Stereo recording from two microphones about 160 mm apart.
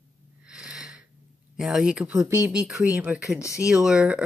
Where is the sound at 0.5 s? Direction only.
5° right (ahead or behind).